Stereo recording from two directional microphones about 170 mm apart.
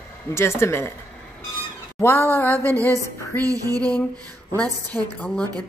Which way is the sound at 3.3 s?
20° right (ahead or behind).